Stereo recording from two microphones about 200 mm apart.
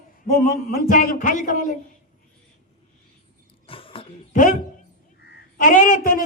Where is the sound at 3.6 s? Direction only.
25° left (ahead or behind).